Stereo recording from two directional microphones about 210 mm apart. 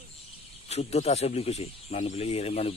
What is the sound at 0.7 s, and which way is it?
Speech, 30° left (ahead or behind).